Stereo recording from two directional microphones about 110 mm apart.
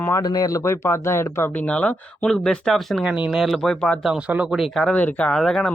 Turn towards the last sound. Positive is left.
turn(degrees=5)  # may be behind; listen again after turning